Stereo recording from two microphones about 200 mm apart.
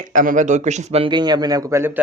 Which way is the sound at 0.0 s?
40° right (ahead or behind).